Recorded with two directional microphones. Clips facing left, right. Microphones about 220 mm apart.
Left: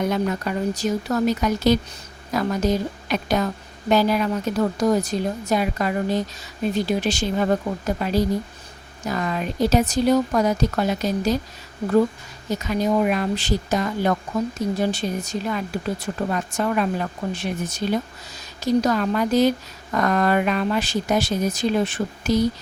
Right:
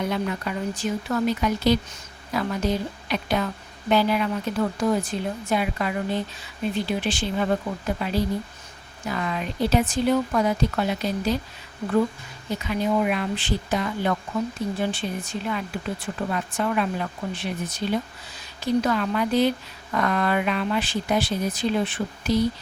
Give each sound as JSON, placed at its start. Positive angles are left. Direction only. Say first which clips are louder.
{"t": 0.1, "sound": "a woman's voice", "louder": "left 4 dB", "side_deg": 40}
{"t": 12.5, "sound": "a woman's voice", "louder": "left 3 dB", "side_deg": 40}